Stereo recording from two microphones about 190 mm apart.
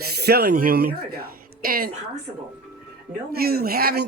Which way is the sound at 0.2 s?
55° right (ahead or behind).